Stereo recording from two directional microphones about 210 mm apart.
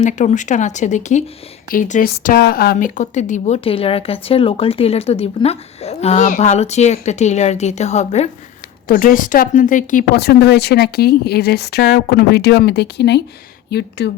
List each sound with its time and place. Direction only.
0.0 s speech: 35° left (ahead or behind); by 14.1 s 50° left (ahead or behind)